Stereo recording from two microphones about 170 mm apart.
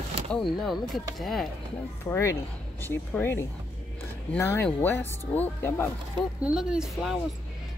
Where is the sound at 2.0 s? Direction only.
15° left (ahead or behind).